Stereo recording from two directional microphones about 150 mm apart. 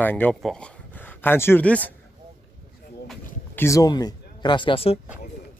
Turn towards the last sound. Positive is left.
turn(degrees=40)  # may be behind; listen again after turning